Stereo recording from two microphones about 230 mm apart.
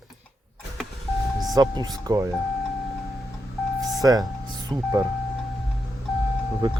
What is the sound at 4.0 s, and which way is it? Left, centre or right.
Speech, centre.